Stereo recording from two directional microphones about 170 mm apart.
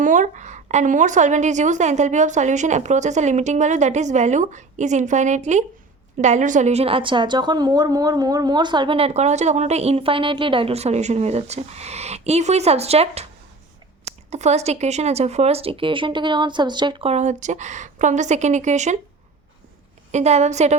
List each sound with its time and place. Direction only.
0.0 s a woman's voice: 50° right (ahead or behind)
20.1 s a woman's voice: 40° right (ahead or behind)